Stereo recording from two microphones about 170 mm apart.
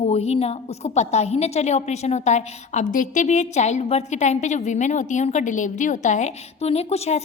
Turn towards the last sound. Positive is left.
turn(degrees=40)  # may be behind; listen again after turning